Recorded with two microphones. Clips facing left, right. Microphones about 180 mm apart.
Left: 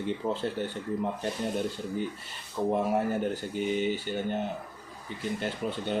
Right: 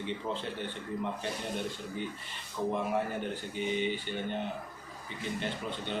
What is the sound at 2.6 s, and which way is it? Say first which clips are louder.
Speech: left 5 dB; 40° left (ahead or behind).